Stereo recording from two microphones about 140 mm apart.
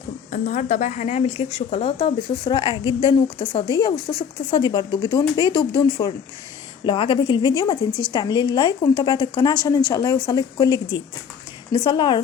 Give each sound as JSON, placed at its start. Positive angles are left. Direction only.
{"t": 0.3, "sound": "a woman's voice", "side_deg": 70}